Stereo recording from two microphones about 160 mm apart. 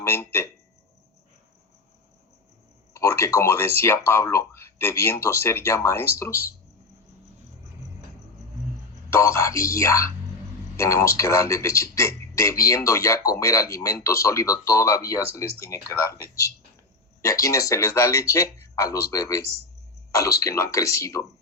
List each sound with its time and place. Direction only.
0.0 s speech: 15° left (ahead or behind)
2.9 s speech: 15° left (ahead or behind)
9.0 s speech: 15° left (ahead or behind)